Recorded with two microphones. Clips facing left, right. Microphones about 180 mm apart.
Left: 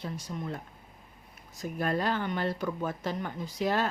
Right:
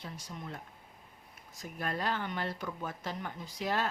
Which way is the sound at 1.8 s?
45° left (ahead or behind).